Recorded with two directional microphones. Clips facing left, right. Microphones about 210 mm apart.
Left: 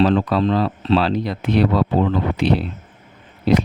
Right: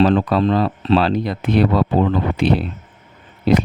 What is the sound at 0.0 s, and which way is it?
Speech, 50° right (ahead or behind).